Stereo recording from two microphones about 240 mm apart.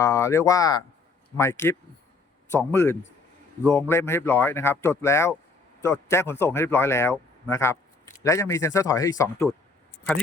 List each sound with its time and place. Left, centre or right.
0.0 s speech: centre